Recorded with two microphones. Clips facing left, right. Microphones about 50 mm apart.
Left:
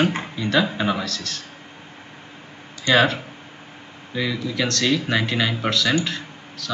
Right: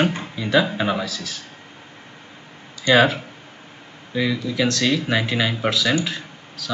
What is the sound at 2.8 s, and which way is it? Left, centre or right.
Speech, centre.